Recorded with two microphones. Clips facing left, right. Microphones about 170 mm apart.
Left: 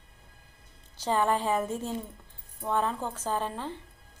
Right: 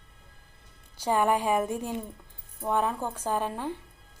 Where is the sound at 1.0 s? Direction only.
10° right (ahead or behind).